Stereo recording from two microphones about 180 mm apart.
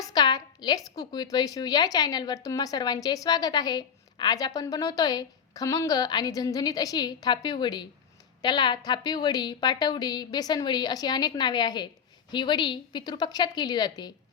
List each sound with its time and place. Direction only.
0.0 s a woman's voice: 20° left (ahead or behind)